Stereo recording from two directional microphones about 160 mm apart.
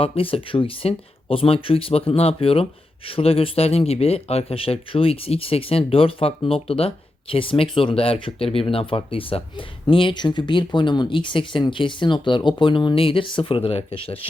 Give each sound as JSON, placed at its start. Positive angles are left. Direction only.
{"t": 0.0, "sound": "speech", "side_deg": 35}